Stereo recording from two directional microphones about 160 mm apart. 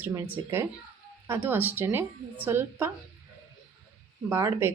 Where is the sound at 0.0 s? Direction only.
15° right (ahead or behind).